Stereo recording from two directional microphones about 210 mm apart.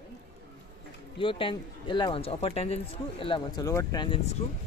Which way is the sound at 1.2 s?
25° left (ahead or behind).